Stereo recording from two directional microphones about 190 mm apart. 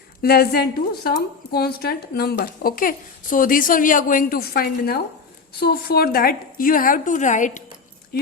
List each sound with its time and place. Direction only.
0.2 s a woman's voice: 55° left (ahead or behind)